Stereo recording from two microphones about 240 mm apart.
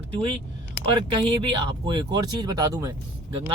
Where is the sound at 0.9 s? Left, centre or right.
Right.